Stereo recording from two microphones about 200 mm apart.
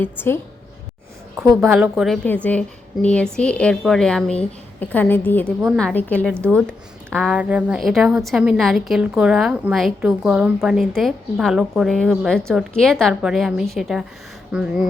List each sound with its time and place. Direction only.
0.0 s a woman's voice: 10° left (ahead or behind)
1.7 s a woman's voice: 5° right (ahead or behind)
2.2 s a woman's voice: 10° left (ahead or behind)